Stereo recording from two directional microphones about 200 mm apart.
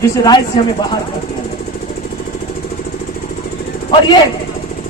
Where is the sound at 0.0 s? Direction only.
20° left (ahead or behind).